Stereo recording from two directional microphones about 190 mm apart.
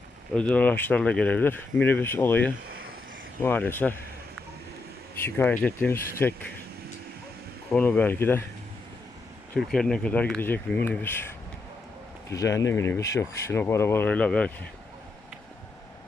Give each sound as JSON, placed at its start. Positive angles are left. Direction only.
{"t": 0.3, "sound": "speech", "side_deg": 5}
{"t": 5.2, "sound": "speech", "side_deg": 10}
{"t": 7.7, "sound": "speech", "side_deg": 10}
{"t": 9.6, "sound": "speech", "side_deg": 5}